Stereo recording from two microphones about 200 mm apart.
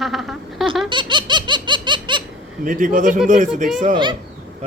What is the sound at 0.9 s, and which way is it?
Baby laughter, 25° right (ahead or behind).